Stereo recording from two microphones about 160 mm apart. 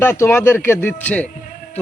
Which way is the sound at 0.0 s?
15° left (ahead or behind).